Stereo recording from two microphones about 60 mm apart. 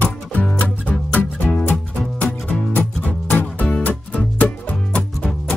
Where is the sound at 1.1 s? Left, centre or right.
Left.